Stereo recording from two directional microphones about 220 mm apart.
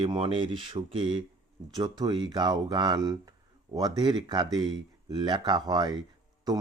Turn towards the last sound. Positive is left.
turn(degrees=-15)  # may be behind; listen again after turning